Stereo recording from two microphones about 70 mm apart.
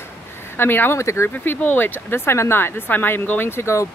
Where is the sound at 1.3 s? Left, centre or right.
Left.